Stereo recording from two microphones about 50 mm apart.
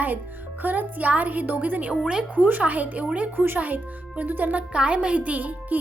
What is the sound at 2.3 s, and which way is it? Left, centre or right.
A child's voice, right.